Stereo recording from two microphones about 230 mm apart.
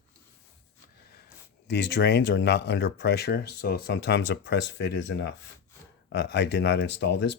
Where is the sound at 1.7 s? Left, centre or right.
Left.